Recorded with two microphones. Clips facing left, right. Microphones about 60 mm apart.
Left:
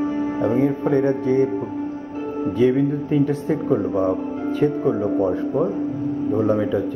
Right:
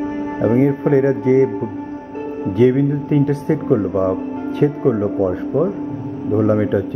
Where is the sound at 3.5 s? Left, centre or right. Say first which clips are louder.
Right 3 dB; centre.